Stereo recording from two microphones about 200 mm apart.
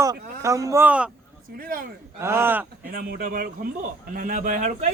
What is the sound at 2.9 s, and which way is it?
Speech, 45° right (ahead or behind).